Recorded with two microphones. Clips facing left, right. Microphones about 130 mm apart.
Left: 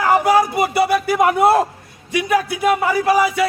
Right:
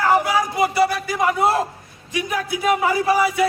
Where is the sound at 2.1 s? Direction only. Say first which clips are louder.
Left 6 dB; 75° left (ahead or behind).